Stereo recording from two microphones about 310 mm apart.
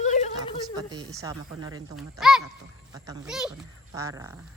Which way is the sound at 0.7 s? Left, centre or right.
Centre.